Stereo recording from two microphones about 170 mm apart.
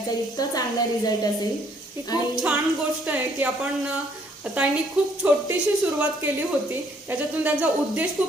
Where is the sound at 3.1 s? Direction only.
10° right (ahead or behind).